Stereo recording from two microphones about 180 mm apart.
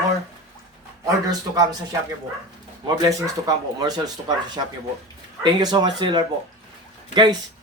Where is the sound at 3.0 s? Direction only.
20° right (ahead or behind).